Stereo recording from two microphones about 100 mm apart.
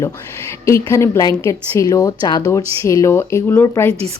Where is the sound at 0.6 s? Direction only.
30° left (ahead or behind).